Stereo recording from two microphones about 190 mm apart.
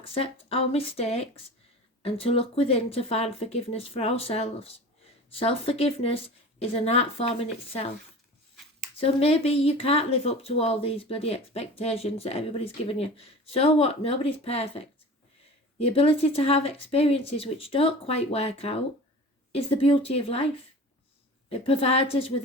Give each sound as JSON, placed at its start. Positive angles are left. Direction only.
{"t": 0.0, "sound": "speech", "side_deg": 30}
{"t": 9.0, "sound": "speech", "side_deg": 30}
{"t": 21.5, "sound": "speech", "side_deg": 30}